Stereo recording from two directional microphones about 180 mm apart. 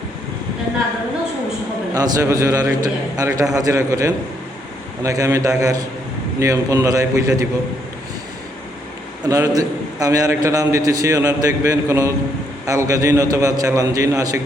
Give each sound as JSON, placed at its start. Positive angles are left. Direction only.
{"t": 1.9, "sound": "a man's voice", "side_deg": -20}
{"t": 9.2, "sound": "a man's voice", "side_deg": -20}